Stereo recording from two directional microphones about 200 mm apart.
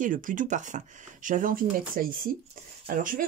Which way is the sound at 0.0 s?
40° right (ahead or behind).